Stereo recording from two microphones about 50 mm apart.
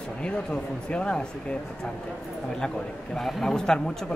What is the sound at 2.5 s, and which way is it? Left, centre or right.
Speech, centre.